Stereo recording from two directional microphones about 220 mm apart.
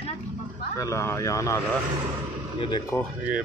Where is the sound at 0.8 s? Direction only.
15° left (ahead or behind).